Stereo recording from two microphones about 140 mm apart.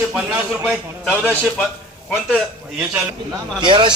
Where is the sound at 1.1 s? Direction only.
10° left (ahead or behind).